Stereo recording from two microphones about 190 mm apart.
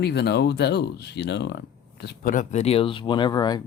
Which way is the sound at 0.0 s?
60° left (ahead or behind).